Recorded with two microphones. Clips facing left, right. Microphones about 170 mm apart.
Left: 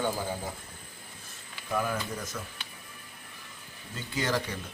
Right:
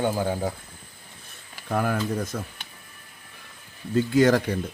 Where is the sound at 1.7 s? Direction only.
60° right (ahead or behind).